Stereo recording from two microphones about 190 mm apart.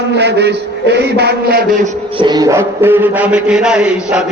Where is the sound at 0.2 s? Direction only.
60° right (ahead or behind).